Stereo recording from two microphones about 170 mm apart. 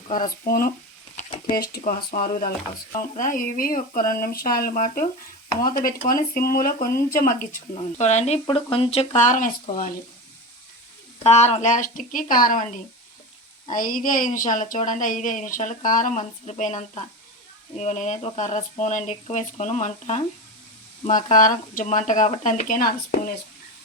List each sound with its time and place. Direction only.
0.1 s speech: 55° left (ahead or behind)
1.1 s a sound: 45° left (ahead or behind)
1.8 s a woman's voice: 55° left (ahead or behind)
7.9 s a woman's voice: 45° left (ahead or behind)
9.2 s a woman's voice: 50° left (ahead or behind)
11.2 s a woman's voice: 40° left (ahead or behind); by 23.3 s 55° left (ahead or behind)